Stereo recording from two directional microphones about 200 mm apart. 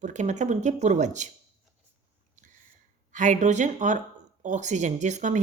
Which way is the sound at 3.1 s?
40° right (ahead or behind).